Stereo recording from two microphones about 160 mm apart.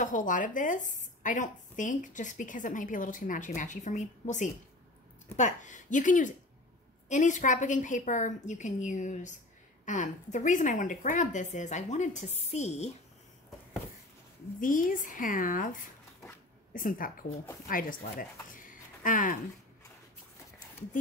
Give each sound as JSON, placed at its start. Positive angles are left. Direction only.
{"t": 0.0, "sound": "a woman's voice", "side_deg": 55}
{"t": 14.6, "sound": "a woman's voice", "side_deg": 55}